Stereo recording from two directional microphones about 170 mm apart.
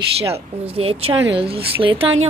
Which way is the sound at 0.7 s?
35° right (ahead or behind).